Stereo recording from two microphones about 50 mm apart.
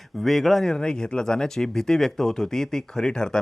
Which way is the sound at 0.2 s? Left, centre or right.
Centre.